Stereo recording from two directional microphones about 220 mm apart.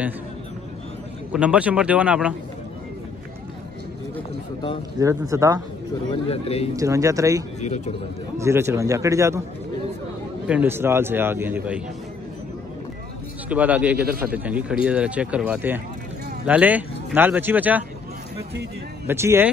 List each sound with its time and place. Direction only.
1.3 s speech: 5° right (ahead or behind)
4.9 s speech: 15° right (ahead or behind)
6.0 s a man's voice: 25° left (ahead or behind)
6.8 s speech: 15° right (ahead or behind)
7.6 s speech: 30° left (ahead or behind)
8.4 s speech: 10° right (ahead or behind)
10.5 s speech: 10° right (ahead or behind)
13.5 s speech: 5° right (ahead or behind)
19.0 s speech: 10° right (ahead or behind)